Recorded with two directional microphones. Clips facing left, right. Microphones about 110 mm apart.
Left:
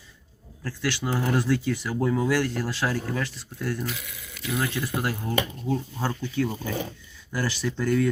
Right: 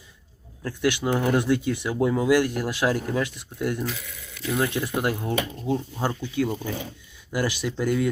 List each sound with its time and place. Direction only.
0.6 s speech: 20° right (ahead or behind)